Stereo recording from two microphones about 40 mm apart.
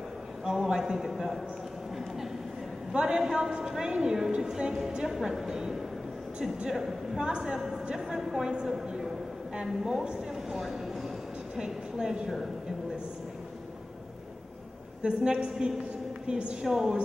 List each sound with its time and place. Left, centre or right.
0.5 s a man's voice: centre
2.9 s a man's voice: right
15.0 s a woman's voice: centre
16.6 s a woman's voice: centre